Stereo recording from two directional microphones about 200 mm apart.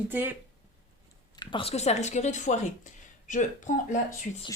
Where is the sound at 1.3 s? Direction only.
25° left (ahead or behind).